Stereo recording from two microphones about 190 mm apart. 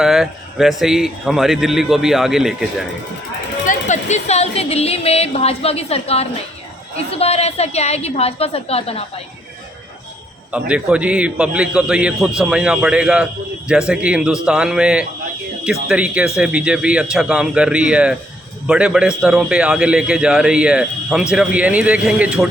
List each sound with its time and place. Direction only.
0.0 s a man's voice: centre (ahead or behind)
3.7 s speech: 40° left (ahead or behind)
10.5 s a man's voice: 5° right (ahead or behind)